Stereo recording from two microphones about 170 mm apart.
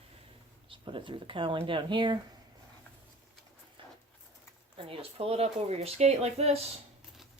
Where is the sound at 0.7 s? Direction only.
30° right (ahead or behind).